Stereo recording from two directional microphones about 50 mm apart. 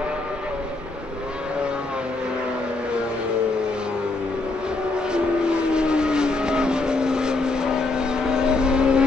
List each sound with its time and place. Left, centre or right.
5.1 s vehicle: centre